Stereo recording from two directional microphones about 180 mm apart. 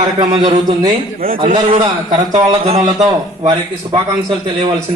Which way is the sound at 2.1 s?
45° right (ahead or behind).